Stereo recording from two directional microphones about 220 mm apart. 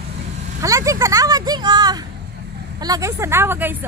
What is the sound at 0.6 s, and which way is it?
Vehicle, 15° right (ahead or behind).